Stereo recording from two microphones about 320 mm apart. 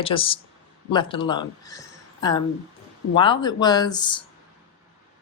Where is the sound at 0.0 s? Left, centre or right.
Centre.